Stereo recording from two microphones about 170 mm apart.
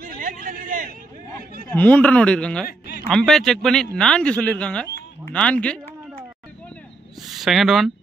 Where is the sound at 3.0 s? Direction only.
Centre (ahead or behind).